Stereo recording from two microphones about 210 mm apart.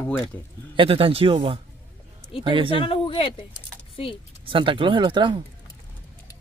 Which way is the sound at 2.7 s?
25° left (ahead or behind).